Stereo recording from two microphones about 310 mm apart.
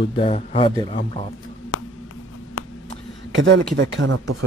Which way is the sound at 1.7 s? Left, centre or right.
Left.